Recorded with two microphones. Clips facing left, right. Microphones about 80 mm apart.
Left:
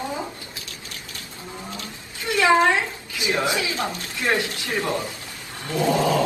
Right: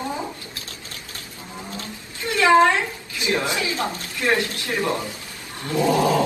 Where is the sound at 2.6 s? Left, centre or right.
Left.